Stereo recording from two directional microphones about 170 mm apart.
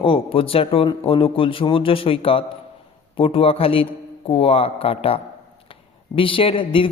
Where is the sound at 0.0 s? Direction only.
30° left (ahead or behind).